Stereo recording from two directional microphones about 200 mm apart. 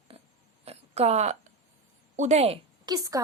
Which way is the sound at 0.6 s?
30° right (ahead or behind).